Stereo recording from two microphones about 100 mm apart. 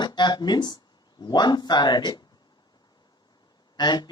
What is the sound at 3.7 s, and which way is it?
Speech, 45° left (ahead or behind).